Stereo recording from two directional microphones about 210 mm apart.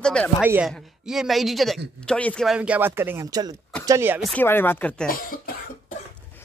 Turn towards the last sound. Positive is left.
turn(degrees=40)  # may be behind; listen again after turning